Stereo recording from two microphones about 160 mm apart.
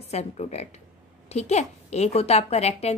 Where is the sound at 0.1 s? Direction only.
45° left (ahead or behind).